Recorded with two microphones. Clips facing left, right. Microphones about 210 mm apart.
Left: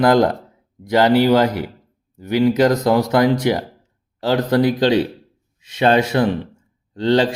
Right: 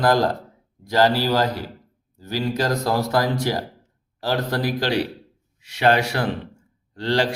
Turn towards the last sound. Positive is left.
turn(degrees=20)  # may be behind; listen again after turning